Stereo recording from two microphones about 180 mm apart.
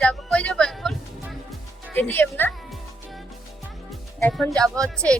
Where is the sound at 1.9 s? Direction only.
10° left (ahead or behind).